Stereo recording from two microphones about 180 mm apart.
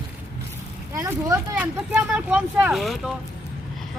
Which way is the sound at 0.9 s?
15° right (ahead or behind).